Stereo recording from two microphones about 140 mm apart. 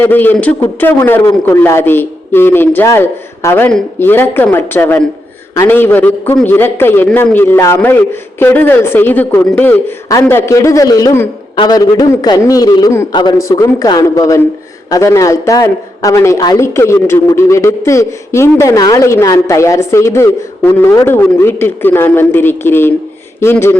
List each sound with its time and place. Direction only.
0.0 s a man's voice: 15° left (ahead or behind)